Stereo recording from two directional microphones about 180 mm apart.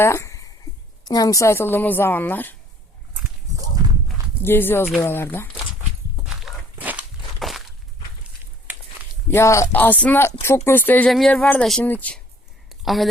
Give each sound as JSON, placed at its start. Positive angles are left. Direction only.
{"t": 0.0, "sound": "a sound", "side_deg": 15}
{"t": 1.0, "sound": "speech", "side_deg": 20}
{"t": 4.4, "sound": "speech", "side_deg": 10}
{"t": 6.2, "sound": "walk", "side_deg": -5}
{"t": 9.3, "sound": "speech", "side_deg": 15}